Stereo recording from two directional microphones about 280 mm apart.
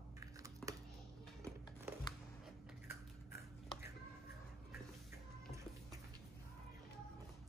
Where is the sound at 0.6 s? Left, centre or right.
Centre.